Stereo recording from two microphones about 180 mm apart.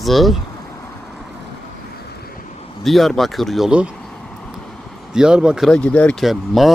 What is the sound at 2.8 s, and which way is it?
Speech, centre (ahead or behind).